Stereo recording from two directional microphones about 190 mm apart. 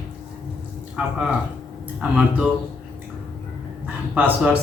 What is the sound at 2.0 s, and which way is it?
Speech, 5° right (ahead or behind).